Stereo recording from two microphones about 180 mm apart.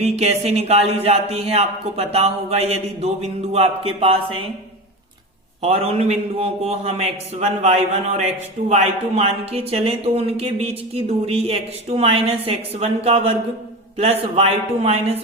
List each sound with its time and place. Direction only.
0.0 s speech: 35° right (ahead or behind)
5.6 s speech: 35° right (ahead or behind)